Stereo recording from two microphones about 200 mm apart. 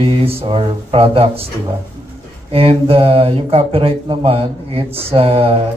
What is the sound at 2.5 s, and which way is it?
Speech, 30° right (ahead or behind).